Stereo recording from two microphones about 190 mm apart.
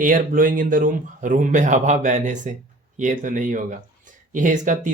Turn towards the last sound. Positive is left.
turn(degrees=-40)  # may be behind; listen again after turning